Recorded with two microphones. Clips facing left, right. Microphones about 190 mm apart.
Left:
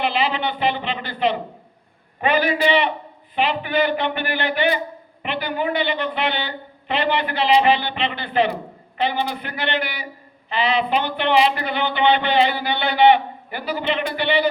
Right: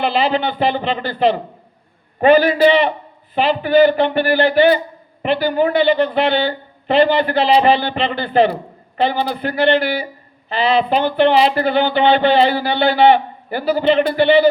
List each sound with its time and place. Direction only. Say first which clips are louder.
0.0 s speech: right 5 dB; 35° right (ahead or behind)